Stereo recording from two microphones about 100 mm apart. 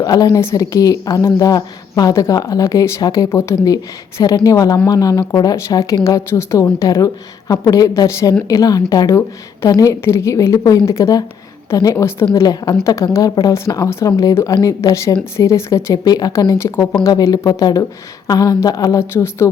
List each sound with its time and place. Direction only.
0.0 s a woman's voice: 40° left (ahead or behind)